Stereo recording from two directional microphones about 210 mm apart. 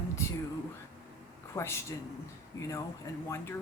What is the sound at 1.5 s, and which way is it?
Speech, 10° left (ahead or behind).